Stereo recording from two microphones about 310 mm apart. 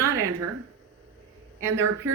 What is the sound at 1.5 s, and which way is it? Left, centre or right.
Speech, right.